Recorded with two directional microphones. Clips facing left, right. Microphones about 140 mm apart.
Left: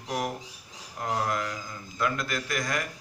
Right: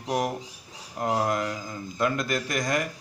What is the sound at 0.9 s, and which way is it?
A man's voice, 25° right (ahead or behind).